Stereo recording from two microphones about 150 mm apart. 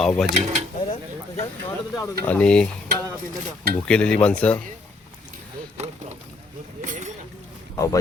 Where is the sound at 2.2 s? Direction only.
10° left (ahead or behind).